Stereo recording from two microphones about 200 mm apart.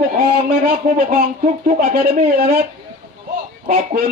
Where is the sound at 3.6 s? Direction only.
40° right (ahead or behind).